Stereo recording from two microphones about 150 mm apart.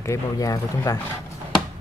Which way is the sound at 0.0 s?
20° left (ahead or behind).